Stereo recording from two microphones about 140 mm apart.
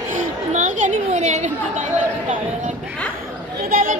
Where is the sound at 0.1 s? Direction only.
60° right (ahead or behind).